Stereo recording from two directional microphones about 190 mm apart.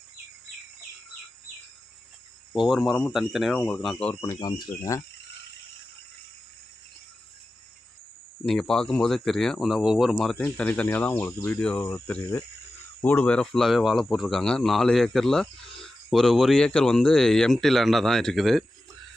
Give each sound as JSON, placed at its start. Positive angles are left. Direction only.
{"t": 2.5, "sound": "speech", "side_deg": 0}
{"t": 4.1, "sound": "speech", "side_deg": 20}
{"t": 8.4, "sound": "speech", "side_deg": 5}